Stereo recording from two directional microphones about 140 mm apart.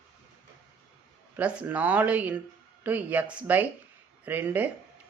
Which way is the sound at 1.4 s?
10° right (ahead or behind).